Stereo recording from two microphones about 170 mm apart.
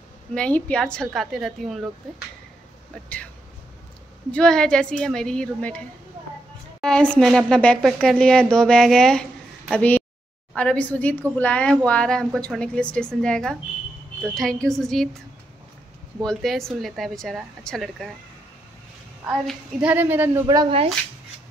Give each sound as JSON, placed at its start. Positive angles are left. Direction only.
{"t": 0.3, "sound": "speech", "side_deg": 5}
{"t": 4.3, "sound": "speech", "side_deg": 5}
{"t": 6.8, "sound": "a woman's voice", "side_deg": 5}
{"t": 16.2, "sound": "speech", "side_deg": 0}
{"t": 19.2, "sound": "a child's voice", "side_deg": -5}
{"t": 20.4, "sound": "speech", "side_deg": -25}